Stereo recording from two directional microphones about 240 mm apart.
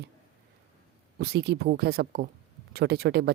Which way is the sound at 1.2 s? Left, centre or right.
Right.